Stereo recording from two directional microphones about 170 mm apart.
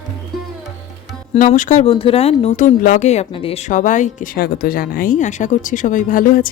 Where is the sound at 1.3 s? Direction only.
40° left (ahead or behind).